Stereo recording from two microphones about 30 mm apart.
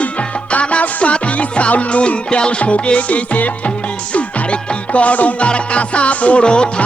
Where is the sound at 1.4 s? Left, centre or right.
Left.